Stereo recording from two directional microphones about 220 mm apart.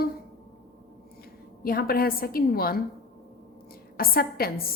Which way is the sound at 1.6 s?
45° left (ahead or behind).